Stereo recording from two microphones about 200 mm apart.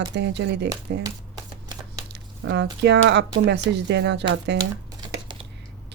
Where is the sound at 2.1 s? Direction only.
60° right (ahead or behind).